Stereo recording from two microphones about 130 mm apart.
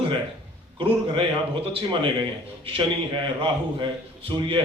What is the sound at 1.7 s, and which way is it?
Speech, 40° right (ahead or behind).